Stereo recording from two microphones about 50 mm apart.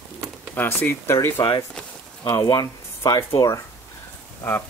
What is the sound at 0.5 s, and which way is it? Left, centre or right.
Speech, left.